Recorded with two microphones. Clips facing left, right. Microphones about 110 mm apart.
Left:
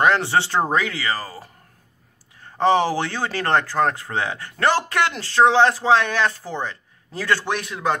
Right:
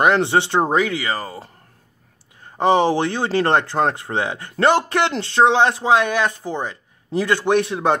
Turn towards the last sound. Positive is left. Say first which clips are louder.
# right 6 dB
turn(degrees=-25)  # may be behind; listen again after turning